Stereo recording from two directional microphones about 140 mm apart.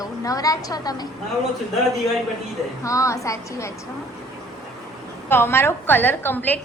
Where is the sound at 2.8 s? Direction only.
20° left (ahead or behind).